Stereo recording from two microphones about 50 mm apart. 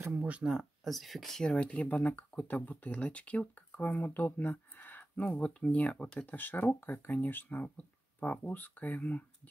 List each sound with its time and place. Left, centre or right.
0.6 s speech: centre
1.4 s speech: left
4.7 s a sound: left
5.1 s speech: left
6.1 s speech: left